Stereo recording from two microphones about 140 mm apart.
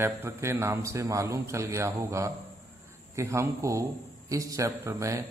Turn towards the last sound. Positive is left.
turn(degrees=-20)  # may be behind; listen again after turning